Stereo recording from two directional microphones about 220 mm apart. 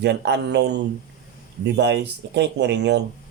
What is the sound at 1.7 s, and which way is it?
Speech, 50° right (ahead or behind).